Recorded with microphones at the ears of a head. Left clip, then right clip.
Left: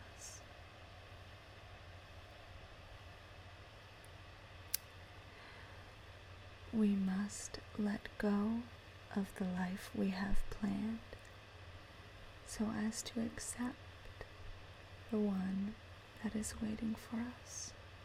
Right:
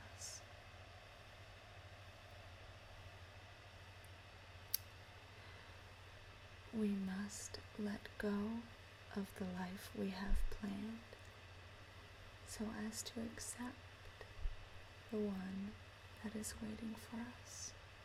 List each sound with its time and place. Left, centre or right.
6.7 s speech: left
12.5 s speech: left
15.1 s speech: left